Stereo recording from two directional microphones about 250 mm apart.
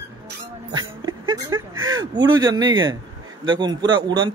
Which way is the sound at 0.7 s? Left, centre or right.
Centre.